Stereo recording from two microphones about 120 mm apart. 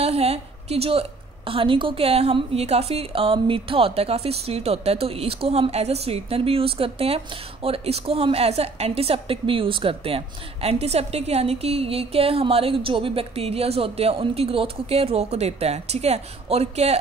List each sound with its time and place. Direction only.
0.0 s a woman's voice: 60° right (ahead or behind)